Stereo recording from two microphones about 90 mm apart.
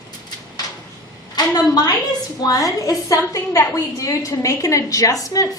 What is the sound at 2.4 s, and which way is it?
A woman's voice, 40° left (ahead or behind).